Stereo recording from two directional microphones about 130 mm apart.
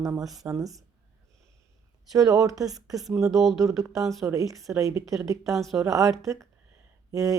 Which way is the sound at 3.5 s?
25° right (ahead or behind).